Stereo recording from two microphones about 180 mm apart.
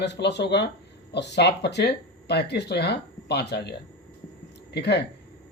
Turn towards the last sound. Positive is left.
turn(degrees=65)  # may be behind; listen again after turning